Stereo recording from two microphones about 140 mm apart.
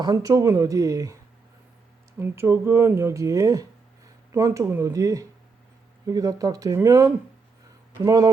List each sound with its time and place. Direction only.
0.0 s speech: 25° right (ahead or behind)